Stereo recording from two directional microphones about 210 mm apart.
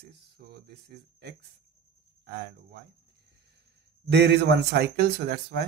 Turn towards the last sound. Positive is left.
turn(degrees=-50)  # may be behind; listen again after turning